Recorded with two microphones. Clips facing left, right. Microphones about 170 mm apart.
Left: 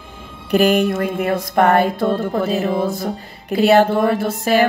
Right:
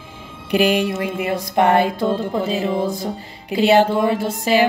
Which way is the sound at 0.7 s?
50° left (ahead or behind).